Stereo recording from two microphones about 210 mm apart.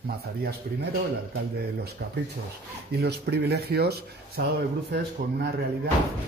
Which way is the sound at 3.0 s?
50° right (ahead or behind).